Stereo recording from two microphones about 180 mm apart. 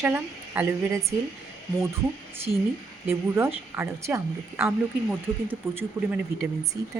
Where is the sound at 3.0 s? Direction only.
10° right (ahead or behind).